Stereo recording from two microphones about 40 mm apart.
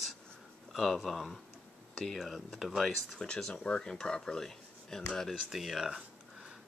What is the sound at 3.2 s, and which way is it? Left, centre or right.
Speech, left.